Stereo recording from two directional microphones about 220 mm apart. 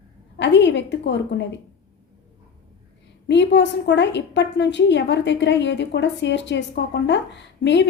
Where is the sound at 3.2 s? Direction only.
55° left (ahead or behind).